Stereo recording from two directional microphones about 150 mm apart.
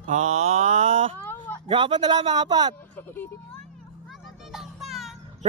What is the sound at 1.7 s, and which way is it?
Speech, 35° right (ahead or behind).